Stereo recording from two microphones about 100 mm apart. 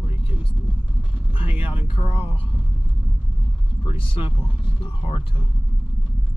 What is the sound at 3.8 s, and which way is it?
Speech, 60° left (ahead or behind).